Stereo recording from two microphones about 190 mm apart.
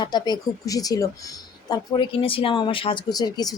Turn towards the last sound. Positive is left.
turn(degrees=20)  # may be behind; listen again after turning